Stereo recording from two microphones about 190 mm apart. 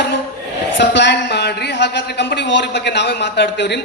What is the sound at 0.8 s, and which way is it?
Speech, 65° left (ahead or behind).